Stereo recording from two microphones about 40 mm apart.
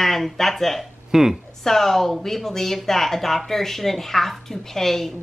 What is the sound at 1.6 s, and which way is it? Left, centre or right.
Speech, centre.